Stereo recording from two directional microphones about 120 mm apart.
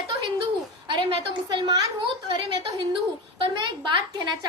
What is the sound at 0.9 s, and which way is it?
Speech, 40° right (ahead or behind).